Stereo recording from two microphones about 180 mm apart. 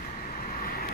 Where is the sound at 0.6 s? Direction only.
55° left (ahead or behind).